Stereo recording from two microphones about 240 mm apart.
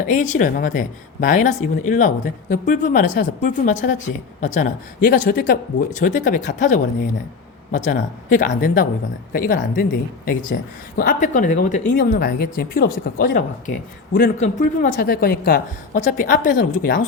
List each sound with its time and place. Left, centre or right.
0.0 s a woman's voice: left